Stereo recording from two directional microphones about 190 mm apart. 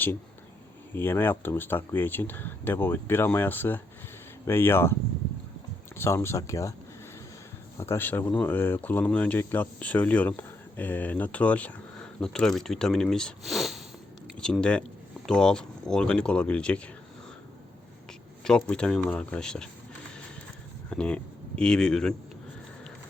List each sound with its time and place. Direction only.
0.9 s speech: 10° left (ahead or behind)
6.0 s speech: 15° left (ahead or behind)
7.8 s speech: 10° left (ahead or behind)
18.4 s speech: 5° left (ahead or behind)
20.9 s speech: 5° left (ahead or behind)